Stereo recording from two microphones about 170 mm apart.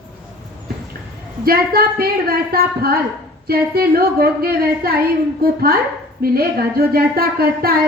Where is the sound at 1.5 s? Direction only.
65° right (ahead or behind).